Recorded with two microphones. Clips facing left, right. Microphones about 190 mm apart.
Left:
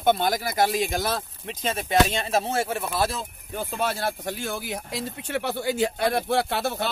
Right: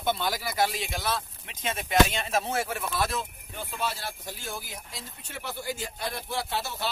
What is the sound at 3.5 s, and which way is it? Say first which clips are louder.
Speech: left 6 dB; 45° left (ahead or behind).